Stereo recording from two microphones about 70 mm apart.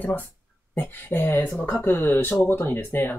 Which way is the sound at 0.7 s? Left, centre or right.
Left.